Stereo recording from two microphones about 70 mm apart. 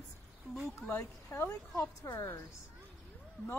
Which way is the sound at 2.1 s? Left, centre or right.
Left.